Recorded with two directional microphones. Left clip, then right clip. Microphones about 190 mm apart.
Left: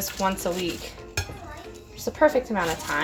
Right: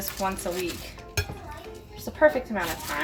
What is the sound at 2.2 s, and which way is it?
Speech, 55° left (ahead or behind).